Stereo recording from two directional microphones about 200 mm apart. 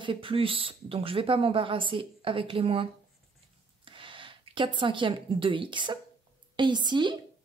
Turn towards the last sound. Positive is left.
turn(degrees=-20)  # may be behind; listen again after turning